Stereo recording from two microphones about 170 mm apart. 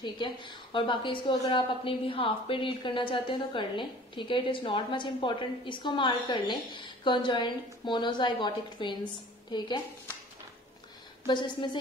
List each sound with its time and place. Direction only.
0.0 s a woman's voice: 25° left (ahead or behind)
11.2 s a woman's voice: 25° left (ahead or behind)